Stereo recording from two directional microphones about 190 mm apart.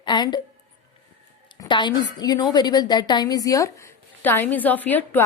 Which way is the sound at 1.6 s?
25° left (ahead or behind).